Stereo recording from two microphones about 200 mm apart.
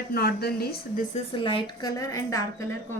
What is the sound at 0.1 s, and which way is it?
Speech, 50° left (ahead or behind).